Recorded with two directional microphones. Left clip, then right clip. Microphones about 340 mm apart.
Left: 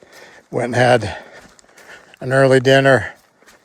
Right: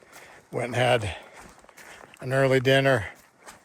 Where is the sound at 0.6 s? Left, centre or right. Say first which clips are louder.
Left 9 dB; left.